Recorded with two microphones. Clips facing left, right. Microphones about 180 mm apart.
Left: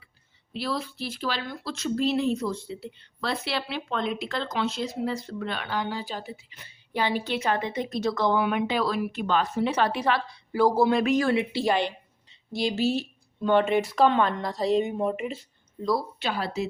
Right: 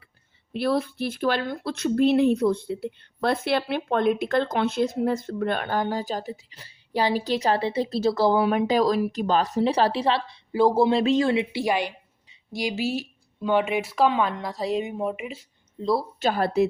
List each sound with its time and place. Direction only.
0.5 s speech: 55° right (ahead or behind); by 15.4 s 5° right (ahead or behind)
15.8 s speech: 25° right (ahead or behind)
16.2 s speech: 50° right (ahead or behind)